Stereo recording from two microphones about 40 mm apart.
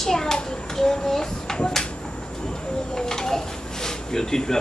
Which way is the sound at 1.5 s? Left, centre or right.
Centre.